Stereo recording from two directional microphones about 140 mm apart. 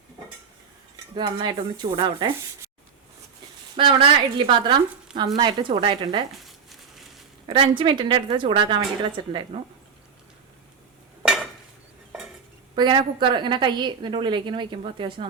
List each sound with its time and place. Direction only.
1.1 s a woman's voice: 35° right (ahead or behind)
3.8 s a woman's voice: 35° right (ahead or behind)
7.4 s a woman's voice: 35° right (ahead or behind)
11.2 s dishes: 5° right (ahead or behind)
12.7 s a woman's voice: 30° right (ahead or behind)